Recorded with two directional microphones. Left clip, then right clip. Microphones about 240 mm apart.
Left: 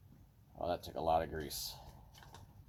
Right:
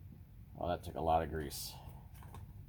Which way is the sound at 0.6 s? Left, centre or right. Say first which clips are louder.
Even; centre.